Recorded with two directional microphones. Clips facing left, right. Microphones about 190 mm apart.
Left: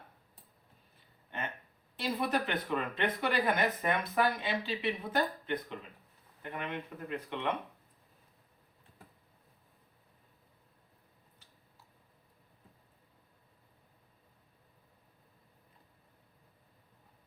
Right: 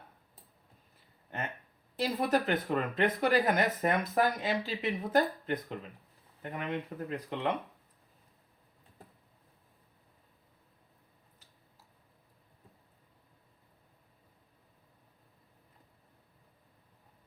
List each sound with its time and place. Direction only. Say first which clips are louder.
2.0 s speech: right 3 dB; 40° right (ahead or behind)